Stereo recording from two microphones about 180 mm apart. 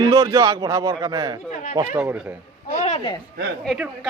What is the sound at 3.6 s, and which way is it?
Speech, centre (ahead or behind).